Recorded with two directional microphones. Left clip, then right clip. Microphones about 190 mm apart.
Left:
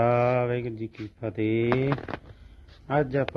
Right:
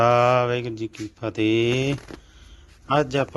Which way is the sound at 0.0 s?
Centre (ahead or behind).